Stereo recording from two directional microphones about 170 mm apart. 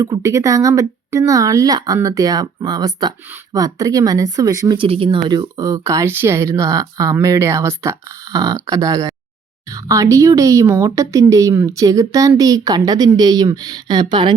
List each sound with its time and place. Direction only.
0.0 s speech: 20° right (ahead or behind)